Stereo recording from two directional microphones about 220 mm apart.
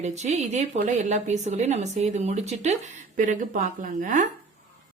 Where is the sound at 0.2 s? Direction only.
30° right (ahead or behind).